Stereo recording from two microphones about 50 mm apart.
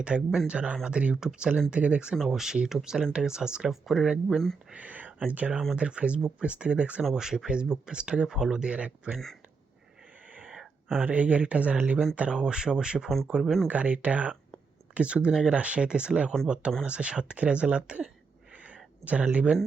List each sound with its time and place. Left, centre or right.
0.0 s speech: right
2.2 s speech: centre
3.7 s speech: centre
4.7 s speech: right
7.1 s speech: centre
9.1 s speech: centre
10.4 s a sound: centre
11.0 s speech: right
13.4 s speech: centre
13.7 s speech: right
18.5 s a sound: right
19.0 s speech: right